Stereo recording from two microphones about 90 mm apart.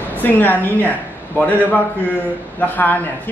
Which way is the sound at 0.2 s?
20° left (ahead or behind).